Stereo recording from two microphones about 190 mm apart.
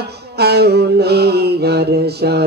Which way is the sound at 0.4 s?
60° right (ahead or behind).